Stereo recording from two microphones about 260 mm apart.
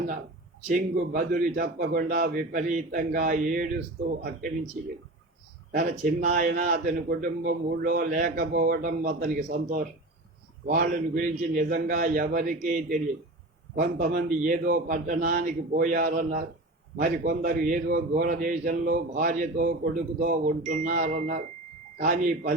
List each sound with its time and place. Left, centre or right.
0.7 s a man's voice: right
5.7 s a man's voice: right